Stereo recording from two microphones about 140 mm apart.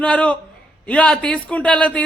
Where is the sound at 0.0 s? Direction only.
10° left (ahead or behind).